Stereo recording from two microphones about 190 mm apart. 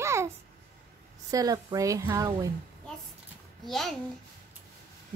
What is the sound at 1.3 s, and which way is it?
A woman's voice, 20° right (ahead or behind).